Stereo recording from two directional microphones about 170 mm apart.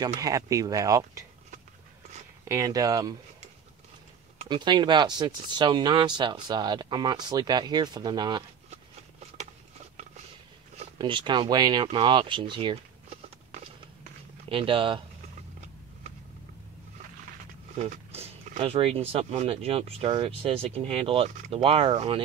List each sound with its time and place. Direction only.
0.0 s speech: 20° right (ahead or behind)
2.4 s speech: 20° right (ahead or behind)
4.5 s speech: 25° right (ahead or behind)
10.8 s speech: 30° right (ahead or behind)
14.5 s speech: 30° right (ahead or behind)
17.7 s speech: 40° right (ahead or behind)